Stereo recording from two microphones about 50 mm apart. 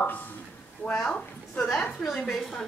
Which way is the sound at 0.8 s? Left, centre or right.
Left.